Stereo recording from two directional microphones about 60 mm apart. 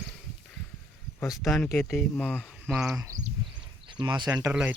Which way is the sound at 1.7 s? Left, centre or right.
Centre.